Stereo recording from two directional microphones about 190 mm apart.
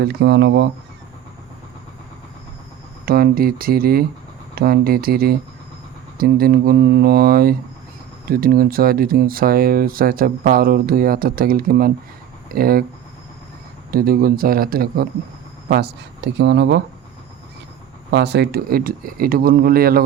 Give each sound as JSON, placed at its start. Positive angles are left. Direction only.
{"t": 0.0, "sound": "speech", "side_deg": -55}
{"t": 3.1, "sound": "speech", "side_deg": -50}
{"t": 13.9, "sound": "speech", "side_deg": -50}
{"t": 18.1, "sound": "speech", "side_deg": -60}